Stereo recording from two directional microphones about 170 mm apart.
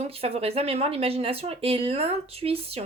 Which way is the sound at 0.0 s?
35° right (ahead or behind).